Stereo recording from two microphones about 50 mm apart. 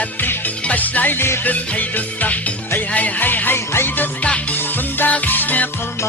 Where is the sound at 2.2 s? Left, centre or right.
Left.